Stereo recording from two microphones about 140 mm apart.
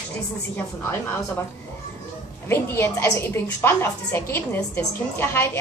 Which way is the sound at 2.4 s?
15° left (ahead or behind).